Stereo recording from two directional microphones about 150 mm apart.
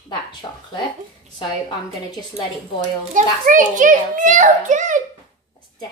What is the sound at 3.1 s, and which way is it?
A child's voice, 60° right (ahead or behind).